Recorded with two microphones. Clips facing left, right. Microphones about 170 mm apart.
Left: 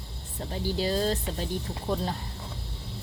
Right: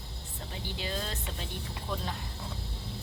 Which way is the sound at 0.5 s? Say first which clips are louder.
Left 9 dB; 40° left (ahead or behind).